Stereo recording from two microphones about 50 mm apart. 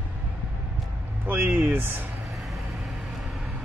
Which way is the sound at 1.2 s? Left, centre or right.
Right.